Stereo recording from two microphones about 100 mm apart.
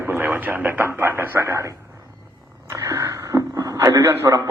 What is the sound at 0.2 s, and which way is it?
Speech, 20° right (ahead or behind).